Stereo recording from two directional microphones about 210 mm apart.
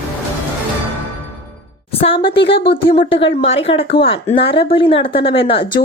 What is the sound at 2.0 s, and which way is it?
Speech, 25° left (ahead or behind).